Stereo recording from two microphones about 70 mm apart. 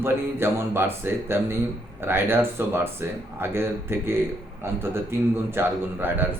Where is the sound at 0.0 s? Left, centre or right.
Right.